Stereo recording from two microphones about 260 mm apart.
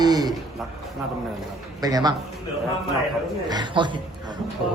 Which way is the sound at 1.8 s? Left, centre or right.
Centre.